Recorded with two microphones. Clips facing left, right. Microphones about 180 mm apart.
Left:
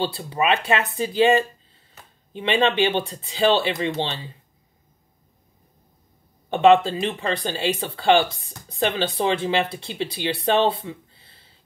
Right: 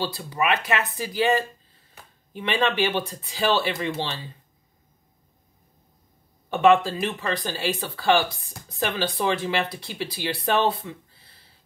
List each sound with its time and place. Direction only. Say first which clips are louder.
0.0 s speech: left 3 dB; 25° left (ahead or behind)
6.5 s speech: left 3 dB; 20° left (ahead or behind)